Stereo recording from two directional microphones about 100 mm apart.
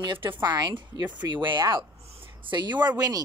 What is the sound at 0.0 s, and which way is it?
A woman's voice, 55° right (ahead or behind).